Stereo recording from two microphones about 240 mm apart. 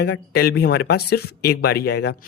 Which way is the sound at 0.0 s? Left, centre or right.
Left.